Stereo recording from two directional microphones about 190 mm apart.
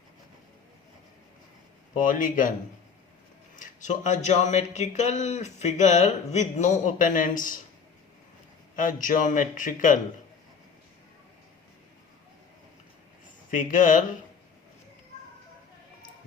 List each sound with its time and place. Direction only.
2.0 s a man's voice: 45° left (ahead or behind)
3.5 s speech: 40° left (ahead or behind)
8.7 s a man's voice: 45° left (ahead or behind)
13.5 s a man's voice: 45° left (ahead or behind)